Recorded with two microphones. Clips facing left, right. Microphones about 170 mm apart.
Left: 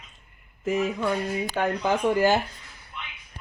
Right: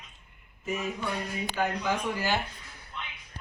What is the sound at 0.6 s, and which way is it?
Speech, 90° left.